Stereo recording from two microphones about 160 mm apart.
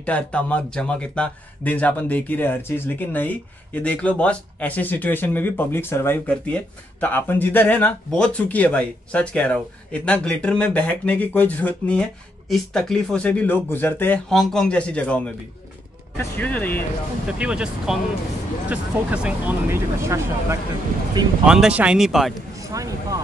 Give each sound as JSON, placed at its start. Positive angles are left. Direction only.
{"t": 0.0, "sound": "speech", "side_deg": 10}
{"t": 14.3, "sound": "speech", "side_deg": 0}
{"t": 17.3, "sound": "speech", "side_deg": -5}
{"t": 21.5, "sound": "speech", "side_deg": -5}
{"t": 22.6, "sound": "speech", "side_deg": -20}